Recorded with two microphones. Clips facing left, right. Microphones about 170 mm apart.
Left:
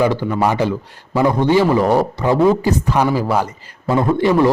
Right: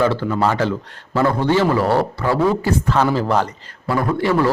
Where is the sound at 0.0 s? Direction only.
15° left (ahead or behind).